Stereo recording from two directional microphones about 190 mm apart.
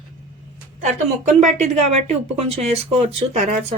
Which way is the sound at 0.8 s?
40° right (ahead or behind).